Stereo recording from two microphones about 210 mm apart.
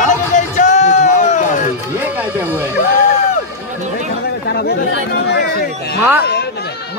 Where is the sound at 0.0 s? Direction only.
35° left (ahead or behind).